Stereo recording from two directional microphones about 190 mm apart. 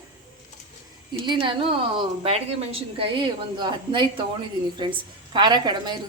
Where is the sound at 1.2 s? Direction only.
25° right (ahead or behind).